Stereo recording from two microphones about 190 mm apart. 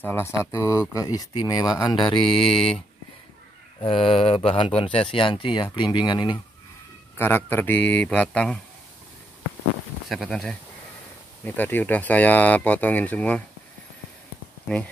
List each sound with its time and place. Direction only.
0.0 s speech: 15° left (ahead or behind)
2.2 s speech: 5° left (ahead or behind)
3.8 s speech: 30° left (ahead or behind)
7.2 s speech: 10° left (ahead or behind)
10.0 s speech: centre (ahead or behind)